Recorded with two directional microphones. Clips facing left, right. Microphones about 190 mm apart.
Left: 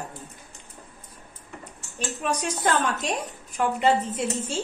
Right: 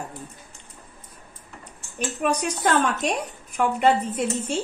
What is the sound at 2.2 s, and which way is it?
Speech, 60° right (ahead or behind).